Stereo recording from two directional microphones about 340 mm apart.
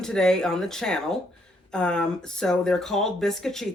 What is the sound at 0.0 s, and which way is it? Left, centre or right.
Speech, centre.